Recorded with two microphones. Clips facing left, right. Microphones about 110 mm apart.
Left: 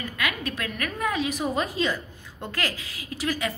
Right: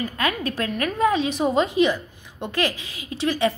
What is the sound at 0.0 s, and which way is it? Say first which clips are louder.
A woman's voice: right 5 dB; 30° right (ahead or behind).